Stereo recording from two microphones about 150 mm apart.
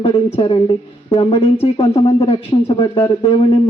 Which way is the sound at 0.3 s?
35° left (ahead or behind).